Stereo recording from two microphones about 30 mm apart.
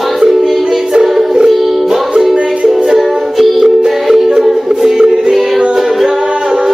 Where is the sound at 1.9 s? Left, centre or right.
Centre.